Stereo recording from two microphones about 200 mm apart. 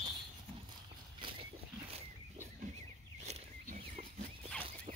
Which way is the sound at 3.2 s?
35° right (ahead or behind).